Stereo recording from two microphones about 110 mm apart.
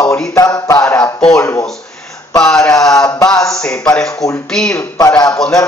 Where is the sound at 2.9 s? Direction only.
30° left (ahead or behind).